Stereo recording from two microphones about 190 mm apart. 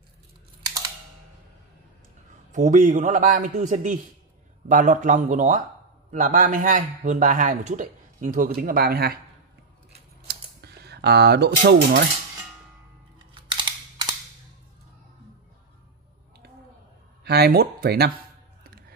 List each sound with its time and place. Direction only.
2.5 s a man's voice: 45° right (ahead or behind)
10.2 s typing: 60° right (ahead or behind)
13.3 s camera: 25° right (ahead or behind)
17.2 s speech: 55° right (ahead or behind)